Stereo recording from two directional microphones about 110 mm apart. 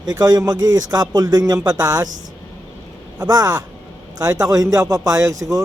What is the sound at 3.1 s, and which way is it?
Speech, 35° right (ahead or behind).